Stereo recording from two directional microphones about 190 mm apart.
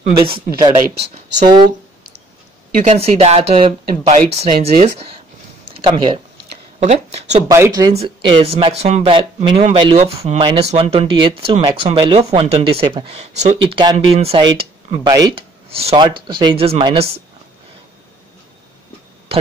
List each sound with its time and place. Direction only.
0.0 s speech: 30° right (ahead or behind)
2.7 s speech: 40° right (ahead or behind)
7.4 s speech: 15° right (ahead or behind)
7.9 s speech: 30° right (ahead or behind)
15.7 s speech: 30° right (ahead or behind)